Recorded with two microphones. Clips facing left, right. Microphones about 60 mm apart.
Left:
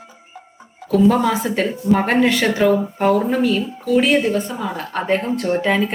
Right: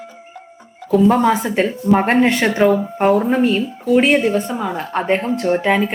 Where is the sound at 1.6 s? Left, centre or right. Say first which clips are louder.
Right 2 dB; right.